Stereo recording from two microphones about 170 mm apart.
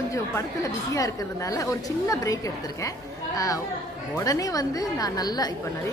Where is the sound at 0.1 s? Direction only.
20° left (ahead or behind).